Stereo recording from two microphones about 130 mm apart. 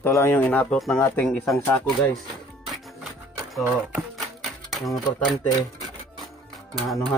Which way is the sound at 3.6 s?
15° right (ahead or behind).